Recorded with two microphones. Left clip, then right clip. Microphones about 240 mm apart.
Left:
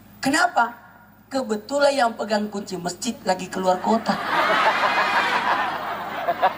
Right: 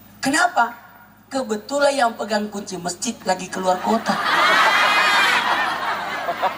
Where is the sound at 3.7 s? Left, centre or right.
Left.